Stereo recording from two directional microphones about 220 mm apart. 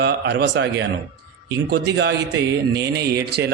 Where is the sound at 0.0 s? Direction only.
50° right (ahead or behind).